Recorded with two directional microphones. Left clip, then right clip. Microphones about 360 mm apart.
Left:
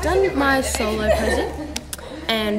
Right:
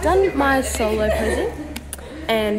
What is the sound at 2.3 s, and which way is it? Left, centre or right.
Speech, centre.